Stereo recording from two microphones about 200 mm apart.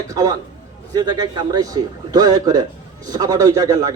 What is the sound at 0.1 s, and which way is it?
A man's voice, 15° right (ahead or behind).